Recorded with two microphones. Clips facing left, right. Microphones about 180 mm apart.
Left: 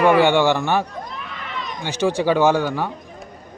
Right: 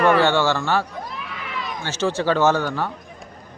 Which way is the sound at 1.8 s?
15° left (ahead or behind).